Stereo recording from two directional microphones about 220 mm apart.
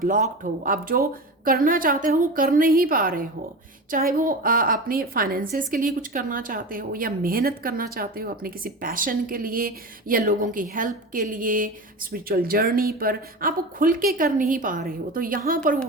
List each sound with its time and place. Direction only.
0.0 s a woman's voice: 40° right (ahead or behind)